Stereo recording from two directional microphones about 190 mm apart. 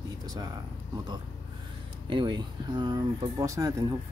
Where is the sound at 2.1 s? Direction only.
25° right (ahead or behind).